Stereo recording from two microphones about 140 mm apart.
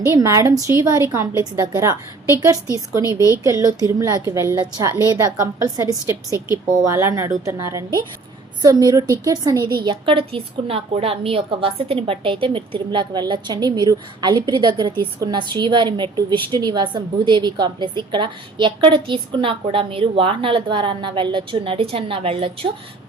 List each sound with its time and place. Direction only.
0.1 s a woman's voice: 25° right (ahead or behind); by 22.7 s 40° right (ahead or behind)